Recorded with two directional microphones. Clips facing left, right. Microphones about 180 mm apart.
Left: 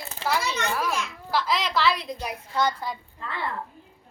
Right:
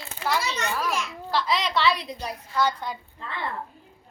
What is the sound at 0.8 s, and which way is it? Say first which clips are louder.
A child's voice: even; 10° left (ahead or behind).